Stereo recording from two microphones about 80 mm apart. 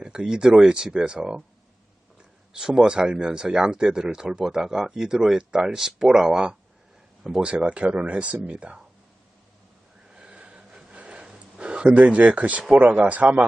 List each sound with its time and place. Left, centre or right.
0.0 s speech: centre
2.5 s speech: centre
10.1 s a sound: centre